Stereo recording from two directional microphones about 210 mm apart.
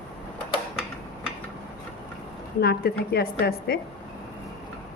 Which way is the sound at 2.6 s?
50° left (ahead or behind).